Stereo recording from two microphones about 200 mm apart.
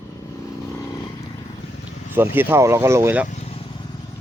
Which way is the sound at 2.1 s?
10° right (ahead or behind).